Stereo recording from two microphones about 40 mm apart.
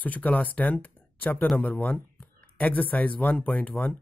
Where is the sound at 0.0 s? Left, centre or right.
Left.